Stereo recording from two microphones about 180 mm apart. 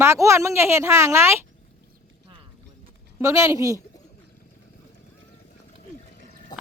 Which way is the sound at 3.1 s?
15° right (ahead or behind).